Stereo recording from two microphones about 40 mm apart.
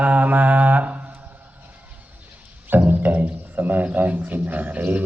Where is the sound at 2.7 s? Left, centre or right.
Right.